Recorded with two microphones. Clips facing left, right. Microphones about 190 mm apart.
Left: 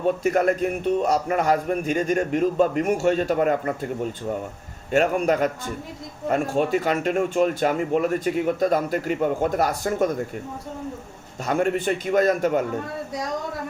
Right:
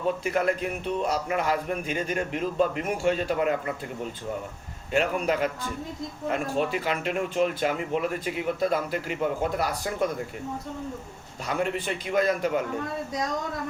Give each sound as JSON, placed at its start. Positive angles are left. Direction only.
{"t": 0.2, "sound": "a man's voice", "side_deg": 45}
{"t": 11.4, "sound": "a man's voice", "side_deg": 45}